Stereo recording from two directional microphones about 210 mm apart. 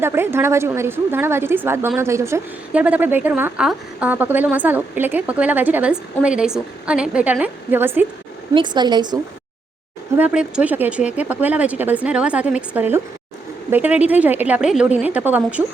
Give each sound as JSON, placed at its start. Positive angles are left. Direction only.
{"t": 0.0, "sound": "a woman's voice", "side_deg": -10}
{"t": 8.5, "sound": "speech", "side_deg": -20}
{"t": 10.2, "sound": "a woman's voice", "side_deg": -5}